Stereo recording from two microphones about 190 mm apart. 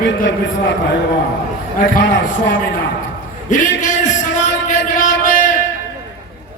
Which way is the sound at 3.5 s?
40° left (ahead or behind).